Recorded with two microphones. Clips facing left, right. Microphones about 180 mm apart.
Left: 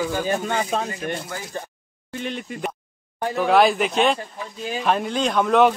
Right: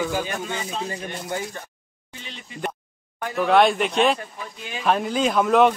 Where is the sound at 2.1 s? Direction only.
55° left (ahead or behind).